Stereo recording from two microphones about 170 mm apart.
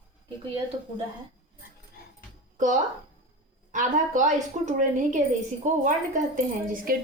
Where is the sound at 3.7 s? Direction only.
50° right (ahead or behind).